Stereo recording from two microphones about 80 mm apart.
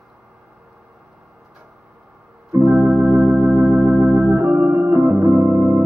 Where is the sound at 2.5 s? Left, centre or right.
Right.